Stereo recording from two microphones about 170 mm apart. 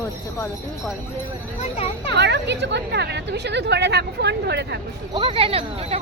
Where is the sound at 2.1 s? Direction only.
85° right.